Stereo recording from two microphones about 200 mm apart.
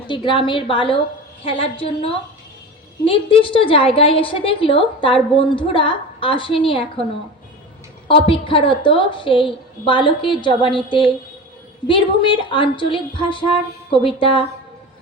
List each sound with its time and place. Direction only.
0.1 s a woman's voice: 25° left (ahead or behind)
8.0 s a woman's voice: 25° left (ahead or behind)
11.9 s a woman's voice: 25° left (ahead or behind)